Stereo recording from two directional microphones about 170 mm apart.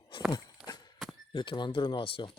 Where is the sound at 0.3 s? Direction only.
25° left (ahead or behind).